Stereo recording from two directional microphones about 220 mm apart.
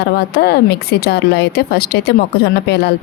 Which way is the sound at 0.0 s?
50° left (ahead or behind).